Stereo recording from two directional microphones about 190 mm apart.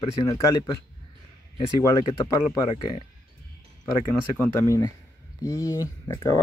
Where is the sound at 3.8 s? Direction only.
10° left (ahead or behind).